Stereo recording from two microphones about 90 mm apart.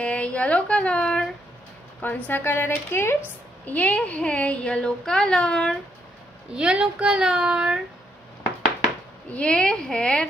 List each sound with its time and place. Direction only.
0.0 s a woman's voice: 15° left (ahead or behind)
6.5 s a child's voice: 10° right (ahead or behind)
9.3 s speech: 10° left (ahead or behind)